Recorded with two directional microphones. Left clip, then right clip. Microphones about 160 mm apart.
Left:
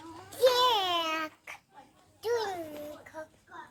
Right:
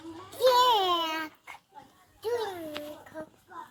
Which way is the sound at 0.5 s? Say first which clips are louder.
Right 3 dB; 20° left (ahead or behind).